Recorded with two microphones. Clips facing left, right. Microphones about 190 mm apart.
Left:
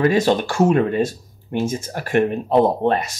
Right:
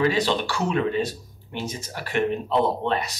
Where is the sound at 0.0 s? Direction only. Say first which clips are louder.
Left 5 dB; 45° left (ahead or behind).